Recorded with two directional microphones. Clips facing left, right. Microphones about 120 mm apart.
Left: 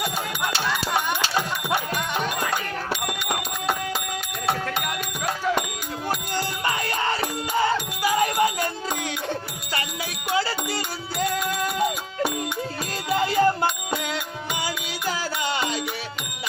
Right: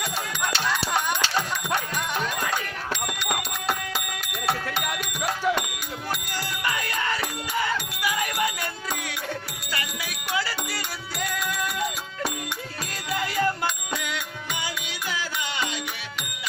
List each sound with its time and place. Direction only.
0.5 s music: 10° left (ahead or behind)
2.5 s bicycle bell: 5° left (ahead or behind)
6.3 s music: 30° left (ahead or behind)
13.1 s music: 30° left (ahead or behind)